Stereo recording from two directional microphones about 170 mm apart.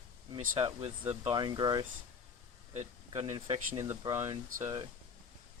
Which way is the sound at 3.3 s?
30° right (ahead or behind).